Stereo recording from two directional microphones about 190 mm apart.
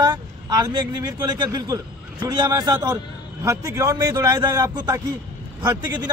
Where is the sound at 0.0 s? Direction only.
20° right (ahead or behind).